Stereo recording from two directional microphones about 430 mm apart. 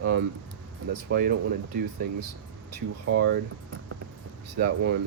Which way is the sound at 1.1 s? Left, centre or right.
Right.